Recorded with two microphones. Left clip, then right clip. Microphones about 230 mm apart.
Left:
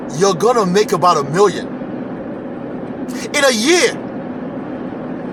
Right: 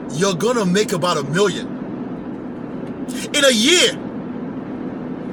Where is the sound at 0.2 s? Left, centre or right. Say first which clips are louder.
Left 5 dB; centre.